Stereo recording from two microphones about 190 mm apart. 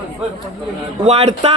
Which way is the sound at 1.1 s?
35° right (ahead or behind).